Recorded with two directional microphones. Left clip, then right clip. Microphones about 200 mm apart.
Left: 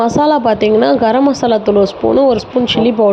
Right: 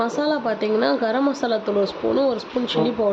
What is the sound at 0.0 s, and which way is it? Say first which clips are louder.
A woman's voice: left 11 dB; 35° left (ahead or behind).